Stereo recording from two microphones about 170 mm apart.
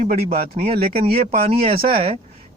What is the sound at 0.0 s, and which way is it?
Speech, 50° right (ahead or behind).